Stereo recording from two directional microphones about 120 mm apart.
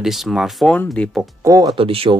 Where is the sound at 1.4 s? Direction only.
30° right (ahead or behind).